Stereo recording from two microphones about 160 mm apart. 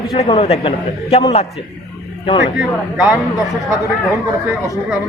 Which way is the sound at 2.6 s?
5° right (ahead or behind).